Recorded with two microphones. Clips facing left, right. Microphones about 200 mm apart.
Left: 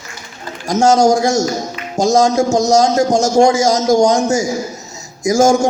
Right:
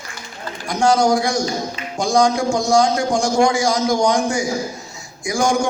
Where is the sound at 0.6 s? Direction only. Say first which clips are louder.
Left 5 dB; 45° left (ahead or behind).